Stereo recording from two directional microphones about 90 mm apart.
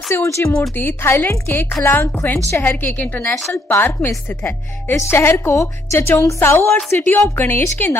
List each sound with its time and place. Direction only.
0.1 s speech: 30° left (ahead or behind)